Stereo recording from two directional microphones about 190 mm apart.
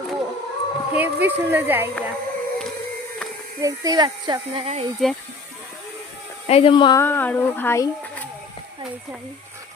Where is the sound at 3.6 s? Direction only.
20° right (ahead or behind).